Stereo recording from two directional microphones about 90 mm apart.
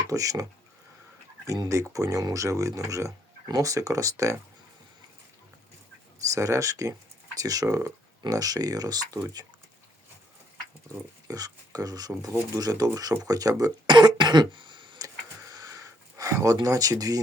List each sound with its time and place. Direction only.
0.1 s speech: 40° right (ahead or behind)
1.7 s speech: 35° right (ahead or behind)
6.2 s speech: 35° right (ahead or behind)
11.3 s speech: 45° right (ahead or behind)
13.9 s throat clearing: 55° right (ahead or behind)
14.9 s a sound: 40° right (ahead or behind)
16.6 s speech: 40° right (ahead or behind)